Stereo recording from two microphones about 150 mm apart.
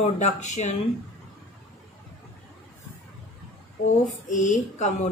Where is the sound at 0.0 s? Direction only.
50° left (ahead or behind).